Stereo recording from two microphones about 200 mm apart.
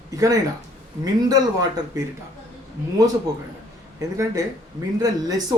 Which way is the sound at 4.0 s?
15° right (ahead or behind).